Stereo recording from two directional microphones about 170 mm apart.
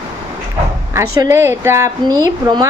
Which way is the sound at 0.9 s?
15° right (ahead or behind).